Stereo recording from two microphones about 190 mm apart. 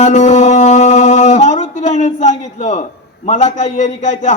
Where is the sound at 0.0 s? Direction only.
35° left (ahead or behind).